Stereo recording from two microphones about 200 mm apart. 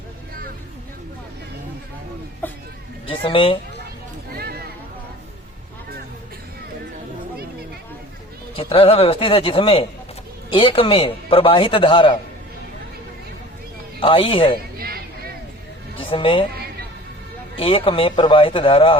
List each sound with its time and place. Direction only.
2.4 s speech: 10° left (ahead or behind)
3.1 s a man's voice: 25° left (ahead or behind)
4.3 s a sound: 50° right (ahead or behind)
8.5 s a man's voice: 25° left (ahead or behind)
14.0 s a man's voice: 25° left (ahead or behind)
14.8 s a sound: 50° right (ahead or behind)
16.0 s speech: 25° left (ahead or behind)
17.6 s a man's voice: 25° left (ahead or behind)